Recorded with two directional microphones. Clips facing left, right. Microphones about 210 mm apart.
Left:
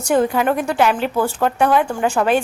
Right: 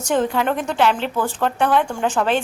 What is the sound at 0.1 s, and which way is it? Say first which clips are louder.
Speech: left 3 dB; 10° left (ahead or behind).